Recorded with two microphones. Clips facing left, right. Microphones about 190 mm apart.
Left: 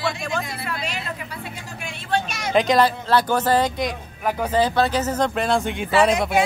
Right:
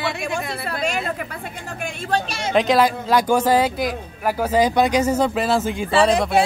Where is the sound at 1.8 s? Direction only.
35° right (ahead or behind).